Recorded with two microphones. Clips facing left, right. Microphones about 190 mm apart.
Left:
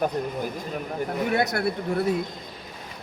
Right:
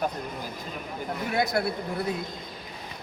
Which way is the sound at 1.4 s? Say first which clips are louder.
Right 4 dB; 70° left (ahead or behind).